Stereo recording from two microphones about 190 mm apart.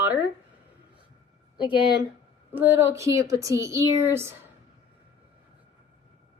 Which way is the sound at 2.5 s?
10° right (ahead or behind).